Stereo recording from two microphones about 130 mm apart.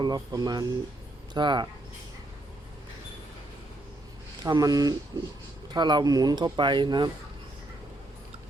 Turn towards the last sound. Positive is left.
turn(degrees=-35)  # may be behind; listen again after turning